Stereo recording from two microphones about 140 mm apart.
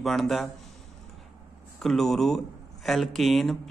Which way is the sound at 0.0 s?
Centre (ahead or behind).